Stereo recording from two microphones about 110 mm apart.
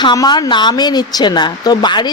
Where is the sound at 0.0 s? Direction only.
40° left (ahead or behind).